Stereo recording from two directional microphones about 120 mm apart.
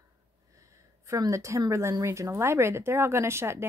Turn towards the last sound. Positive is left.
turn(degrees=-20)  # may be behind; listen again after turning